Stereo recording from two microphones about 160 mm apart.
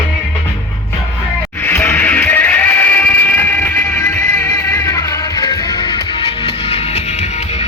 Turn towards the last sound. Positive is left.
turn(degrees=45)  # may be behind; listen again after turning